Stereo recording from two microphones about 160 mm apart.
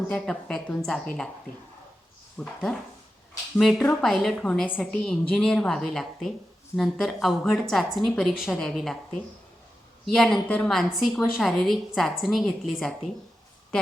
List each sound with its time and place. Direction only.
0.1 s a woman's voice: 5° left (ahead or behind)
2.4 s a woman's voice: 5° left (ahead or behind)
10.1 s a woman's voice: centre (ahead or behind)